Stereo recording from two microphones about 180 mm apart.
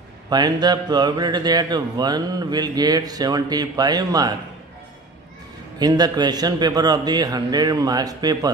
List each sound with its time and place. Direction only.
0.3 s speech: 20° right (ahead or behind)
5.8 s speech: 20° right (ahead or behind)